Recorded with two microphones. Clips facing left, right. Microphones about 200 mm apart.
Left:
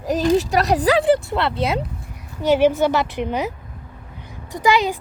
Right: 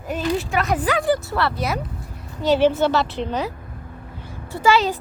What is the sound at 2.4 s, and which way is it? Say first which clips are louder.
Speech: left 1 dB; 15° left (ahead or behind).